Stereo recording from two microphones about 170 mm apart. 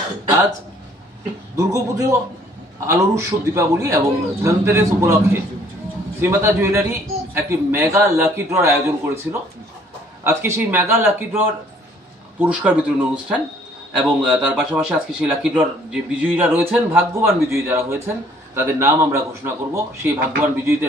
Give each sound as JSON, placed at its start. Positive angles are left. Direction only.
{"t": 1.6, "sound": "speech", "side_deg": -20}